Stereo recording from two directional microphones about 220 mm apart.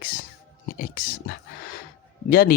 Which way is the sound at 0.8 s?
40° left (ahead or behind).